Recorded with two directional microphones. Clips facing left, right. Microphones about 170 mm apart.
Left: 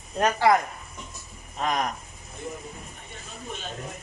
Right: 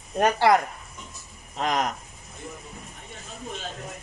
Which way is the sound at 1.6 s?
80° right.